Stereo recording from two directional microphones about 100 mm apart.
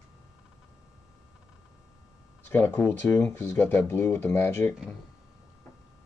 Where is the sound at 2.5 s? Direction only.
20° left (ahead or behind).